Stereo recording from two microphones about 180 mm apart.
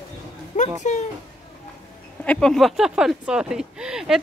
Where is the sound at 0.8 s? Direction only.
40° left (ahead or behind).